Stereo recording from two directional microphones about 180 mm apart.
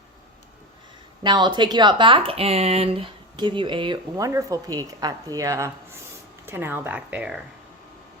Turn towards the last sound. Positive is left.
turn(degrees=-10)  # may be behind; listen again after turning